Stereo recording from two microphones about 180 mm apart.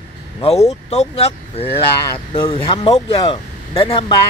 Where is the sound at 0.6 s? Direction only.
35° left (ahead or behind).